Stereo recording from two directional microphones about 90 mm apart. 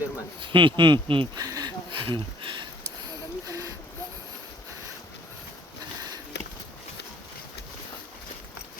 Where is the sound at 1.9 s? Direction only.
70° right (ahead or behind).